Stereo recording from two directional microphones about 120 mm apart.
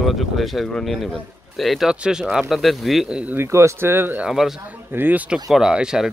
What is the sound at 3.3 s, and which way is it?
Speech, 25° right (ahead or behind).